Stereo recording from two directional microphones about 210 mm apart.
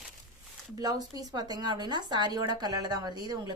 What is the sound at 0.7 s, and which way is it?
A woman's voice, 20° right (ahead or behind).